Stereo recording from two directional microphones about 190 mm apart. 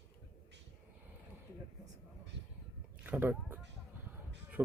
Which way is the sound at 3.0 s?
10° right (ahead or behind).